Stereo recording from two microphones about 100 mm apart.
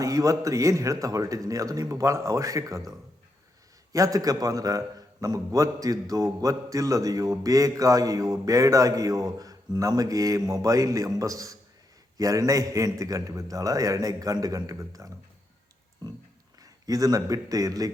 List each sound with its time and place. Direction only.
0.0 s a man's voice: 35° right (ahead or behind)
3.9 s a man's voice: 35° right (ahead or behind)
16.6 s a man's voice: 35° right (ahead or behind)